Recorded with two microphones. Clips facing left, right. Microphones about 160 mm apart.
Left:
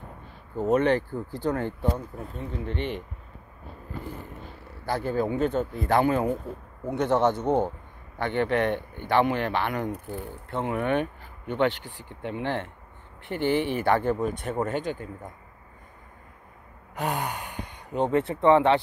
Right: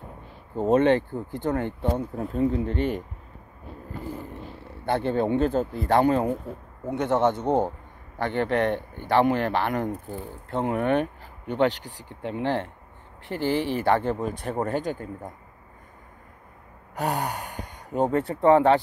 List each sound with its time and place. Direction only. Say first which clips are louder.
0.6 s speech: right 3 dB; 25° right (ahead or behind)
2.3 s speech: right 9 dB; 40° right (ahead or behind)
4.6 s speech: right 3 dB; 25° right (ahead or behind)
6.9 s speech: even; 20° right (ahead or behind)
7.4 s speech: right 1 dB; 35° right (ahead or behind)
16.9 s speech: right 2 dB; 40° right (ahead or behind)